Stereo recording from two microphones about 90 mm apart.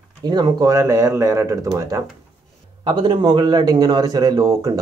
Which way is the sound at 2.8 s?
55° right (ahead or behind).